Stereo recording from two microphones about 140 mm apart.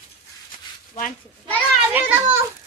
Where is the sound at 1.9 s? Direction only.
10° right (ahead or behind).